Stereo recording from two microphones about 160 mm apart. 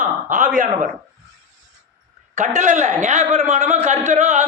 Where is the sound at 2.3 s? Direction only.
50° right (ahead or behind).